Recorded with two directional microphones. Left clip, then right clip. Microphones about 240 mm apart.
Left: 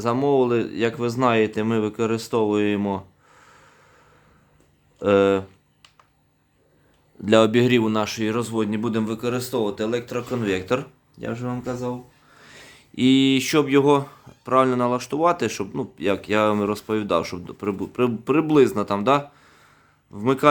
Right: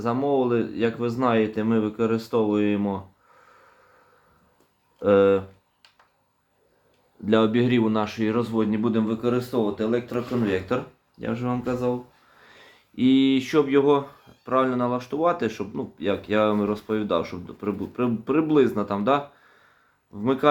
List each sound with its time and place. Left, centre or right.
0.0 s speech: left
4.9 s speech: left
7.3 s speech: left
11.2 s speech: left
12.4 s speech: left